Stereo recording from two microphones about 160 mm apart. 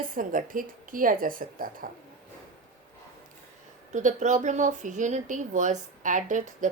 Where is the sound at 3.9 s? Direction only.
50° right (ahead or behind).